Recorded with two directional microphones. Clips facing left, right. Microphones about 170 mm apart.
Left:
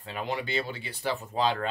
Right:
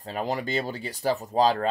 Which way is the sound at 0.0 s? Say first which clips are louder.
Right 4 dB; 40° right (ahead or behind).